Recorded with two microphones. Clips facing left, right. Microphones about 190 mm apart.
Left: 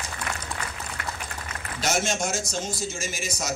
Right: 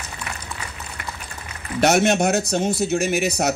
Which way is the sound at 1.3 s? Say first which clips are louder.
Left 1 dB; 60° left (ahead or behind).